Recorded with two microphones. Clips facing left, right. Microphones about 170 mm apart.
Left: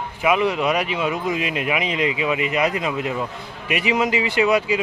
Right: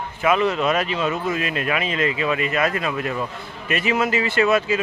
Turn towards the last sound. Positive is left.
turn(degrees=15)  # may be behind; listen again after turning